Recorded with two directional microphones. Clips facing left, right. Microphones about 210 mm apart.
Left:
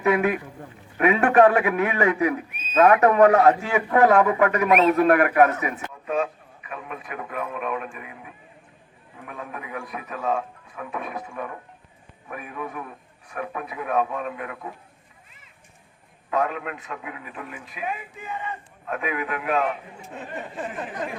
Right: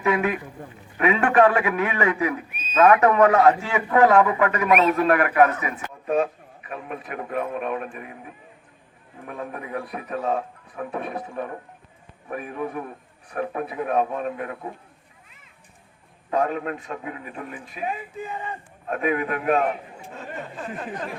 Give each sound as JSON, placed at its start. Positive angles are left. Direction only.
{"t": 0.0, "sound": "a man's voice", "side_deg": 45}
{"t": 6.7, "sound": "a man's voice", "side_deg": -40}
{"t": 16.3, "sound": "a man's voice", "side_deg": -35}